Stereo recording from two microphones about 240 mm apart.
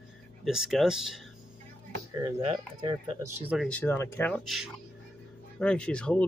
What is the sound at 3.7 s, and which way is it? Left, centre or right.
Speech, centre.